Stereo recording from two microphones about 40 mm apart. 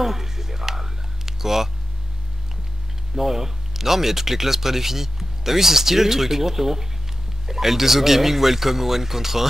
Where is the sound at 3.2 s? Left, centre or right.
Centre.